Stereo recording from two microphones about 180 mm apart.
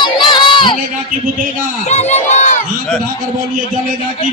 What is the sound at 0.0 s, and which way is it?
Crowd, 25° left (ahead or behind).